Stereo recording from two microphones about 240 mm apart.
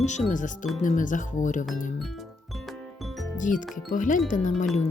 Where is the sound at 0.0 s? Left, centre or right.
Left.